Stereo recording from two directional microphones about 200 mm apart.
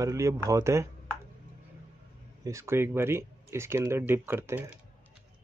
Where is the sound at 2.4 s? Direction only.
15° right (ahead or behind).